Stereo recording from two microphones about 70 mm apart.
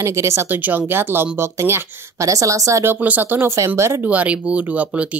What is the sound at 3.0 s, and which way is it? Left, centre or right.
Speech, right.